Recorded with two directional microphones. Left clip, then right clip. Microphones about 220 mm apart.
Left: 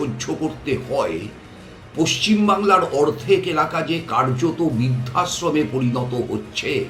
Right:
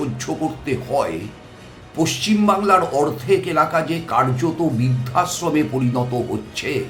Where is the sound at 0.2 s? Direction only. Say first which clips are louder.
Right 1 dB; 20° right (ahead or behind).